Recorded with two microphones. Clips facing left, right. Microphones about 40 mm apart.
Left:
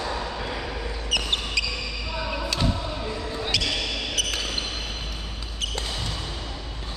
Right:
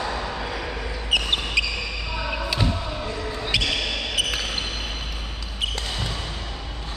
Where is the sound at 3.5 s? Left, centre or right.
Centre.